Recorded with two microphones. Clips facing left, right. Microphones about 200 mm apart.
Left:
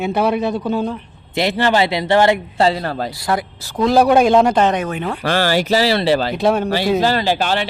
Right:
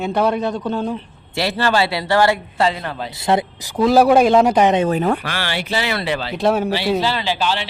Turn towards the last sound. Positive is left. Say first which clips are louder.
# left 3 dB
turn(degrees=50)  # may be behind; listen again after turning